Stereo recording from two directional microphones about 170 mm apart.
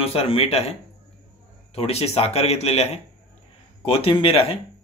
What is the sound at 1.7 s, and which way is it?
Speech, 35° left (ahead or behind).